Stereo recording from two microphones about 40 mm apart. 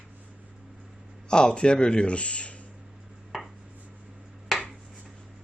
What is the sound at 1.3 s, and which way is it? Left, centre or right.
Speech, centre.